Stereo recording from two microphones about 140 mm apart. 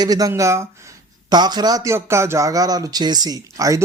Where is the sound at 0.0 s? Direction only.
25° right (ahead or behind).